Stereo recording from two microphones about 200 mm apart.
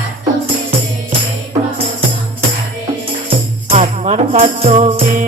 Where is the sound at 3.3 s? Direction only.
35° right (ahead or behind).